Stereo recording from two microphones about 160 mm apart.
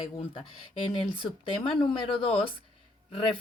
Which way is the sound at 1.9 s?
35° left (ahead or behind).